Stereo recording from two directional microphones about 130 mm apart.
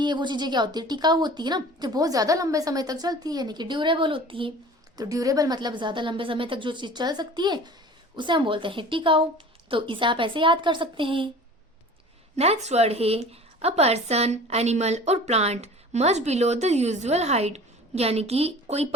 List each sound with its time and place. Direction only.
0.0 s a woman's voice: 35° right (ahead or behind)
4.9 s a woman's voice: 25° right (ahead or behind)
12.4 s a woman's voice: 55° right (ahead or behind)